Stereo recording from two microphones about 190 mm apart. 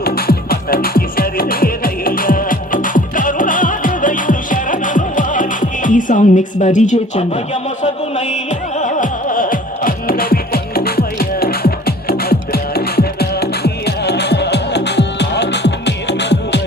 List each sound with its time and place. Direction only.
0.0 s music: 55° left (ahead or behind)
8.8 s music: 45° left (ahead or behind); by 16.6 s 65° left (ahead or behind)